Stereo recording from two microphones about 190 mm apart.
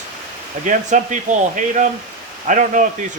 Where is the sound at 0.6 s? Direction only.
40° right (ahead or behind).